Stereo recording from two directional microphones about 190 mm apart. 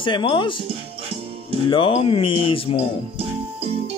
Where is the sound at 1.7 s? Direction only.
25° left (ahead or behind).